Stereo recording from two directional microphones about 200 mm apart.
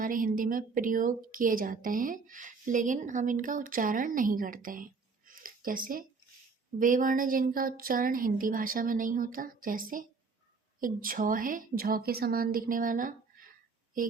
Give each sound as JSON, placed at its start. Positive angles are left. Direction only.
{"t": 0.0, "sound": "speech", "side_deg": -45}
{"t": 5.3, "sound": "a sound", "side_deg": -45}
{"t": 6.7, "sound": "speech", "side_deg": -40}